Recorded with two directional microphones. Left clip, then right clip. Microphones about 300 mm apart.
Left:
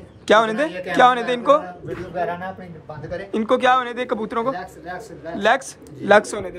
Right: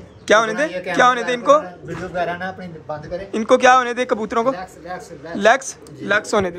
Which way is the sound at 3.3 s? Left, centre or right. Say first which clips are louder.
Right 4 dB; centre.